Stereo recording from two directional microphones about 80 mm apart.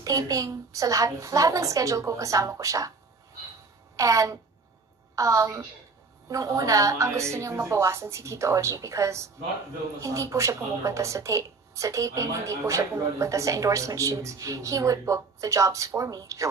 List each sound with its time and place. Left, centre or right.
0.0 s a woman's voice: right
3.9 s a woman's voice: right